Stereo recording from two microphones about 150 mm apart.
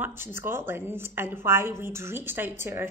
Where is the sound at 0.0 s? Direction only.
15° right (ahead or behind).